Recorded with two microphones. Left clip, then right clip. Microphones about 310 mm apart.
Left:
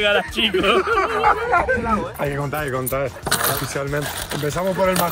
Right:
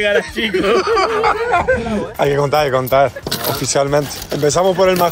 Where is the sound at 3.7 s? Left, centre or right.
Centre.